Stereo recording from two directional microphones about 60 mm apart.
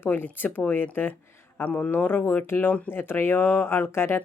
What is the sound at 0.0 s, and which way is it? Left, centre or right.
Speech, left.